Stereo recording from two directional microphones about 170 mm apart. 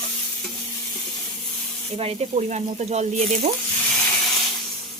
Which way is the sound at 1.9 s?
35° right (ahead or behind).